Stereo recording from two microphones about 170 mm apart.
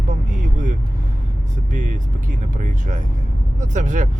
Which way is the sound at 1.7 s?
45° right (ahead or behind).